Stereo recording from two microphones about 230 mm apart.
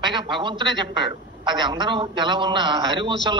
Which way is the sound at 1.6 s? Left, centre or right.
Right.